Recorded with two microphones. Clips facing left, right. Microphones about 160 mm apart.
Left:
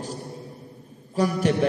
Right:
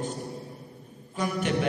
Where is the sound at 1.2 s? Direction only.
35° left (ahead or behind).